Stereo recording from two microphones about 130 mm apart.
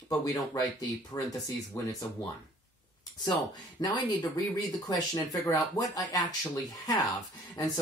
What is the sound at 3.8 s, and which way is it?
Speech, 30° left (ahead or behind).